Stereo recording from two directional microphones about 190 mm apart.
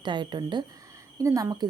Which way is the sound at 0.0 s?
25° right (ahead or behind).